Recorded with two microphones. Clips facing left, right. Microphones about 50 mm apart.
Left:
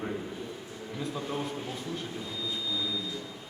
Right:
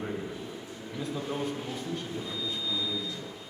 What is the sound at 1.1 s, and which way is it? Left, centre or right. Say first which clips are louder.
Speech: right 2 dB; centre.